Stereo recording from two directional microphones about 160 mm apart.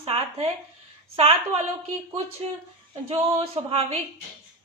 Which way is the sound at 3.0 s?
35° right (ahead or behind).